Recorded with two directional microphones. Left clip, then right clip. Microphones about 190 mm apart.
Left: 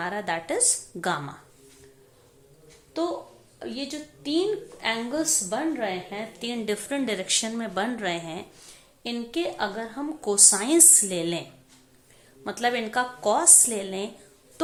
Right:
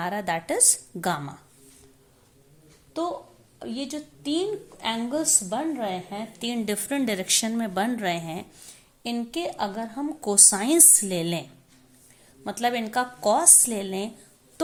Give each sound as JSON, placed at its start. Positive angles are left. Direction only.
{"t": 0.0, "sound": "a woman's voice", "side_deg": -45}
{"t": 3.0, "sound": "a woman's voice", "side_deg": -35}
{"t": 12.5, "sound": "a woman's voice", "side_deg": -40}